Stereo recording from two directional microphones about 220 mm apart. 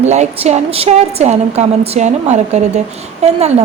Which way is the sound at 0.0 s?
30° right (ahead or behind).